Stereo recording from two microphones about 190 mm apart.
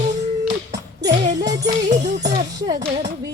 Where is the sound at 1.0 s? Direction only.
20° right (ahead or behind).